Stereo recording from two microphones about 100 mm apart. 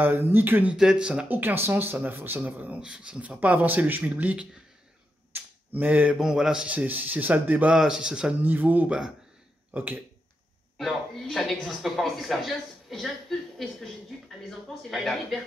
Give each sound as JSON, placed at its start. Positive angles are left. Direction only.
{"t": 0.0, "sound": "speech", "side_deg": -25}
{"t": 0.7, "sound": "speech", "side_deg": -10}
{"t": 5.3, "sound": "a sound", "side_deg": -20}
{"t": 6.1, "sound": "speech", "side_deg": -5}
{"t": 10.8, "sound": "speech", "side_deg": 0}
{"t": 14.9, "sound": "speech", "side_deg": 0}